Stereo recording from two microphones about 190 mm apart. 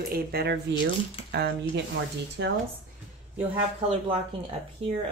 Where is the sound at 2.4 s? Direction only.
75° right (ahead or behind).